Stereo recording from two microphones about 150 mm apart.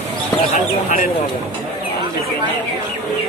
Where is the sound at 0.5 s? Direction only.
70° left (ahead or behind).